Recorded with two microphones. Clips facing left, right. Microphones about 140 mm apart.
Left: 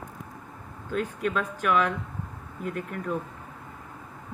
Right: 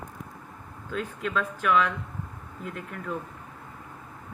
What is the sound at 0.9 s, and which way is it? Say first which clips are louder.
Speech: left 3 dB; 45° left (ahead or behind).